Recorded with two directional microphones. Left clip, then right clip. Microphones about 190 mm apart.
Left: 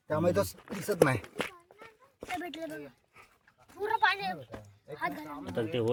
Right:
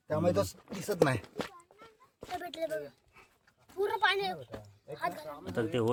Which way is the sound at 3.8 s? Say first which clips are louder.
Left 1 dB; 65° right (ahead or behind).